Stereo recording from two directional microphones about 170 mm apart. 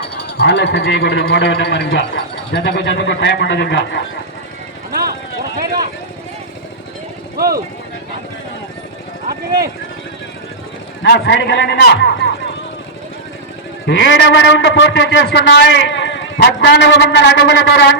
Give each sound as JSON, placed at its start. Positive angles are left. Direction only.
{"t": 0.3, "sound": "a man's voice", "side_deg": 80}
{"t": 7.3, "sound": "speech", "side_deg": -65}
{"t": 11.0, "sound": "a man's voice", "side_deg": 90}
{"t": 13.8, "sound": "a man's voice", "side_deg": 90}